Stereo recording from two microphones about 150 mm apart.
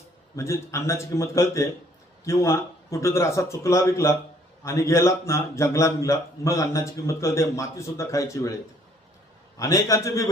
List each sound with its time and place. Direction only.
0.3 s a man's voice: 20° left (ahead or behind)
9.6 s a man's voice: 20° left (ahead or behind)